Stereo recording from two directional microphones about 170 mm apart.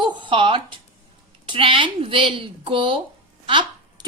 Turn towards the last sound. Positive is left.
turn(degrees=-30)  # may be behind; listen again after turning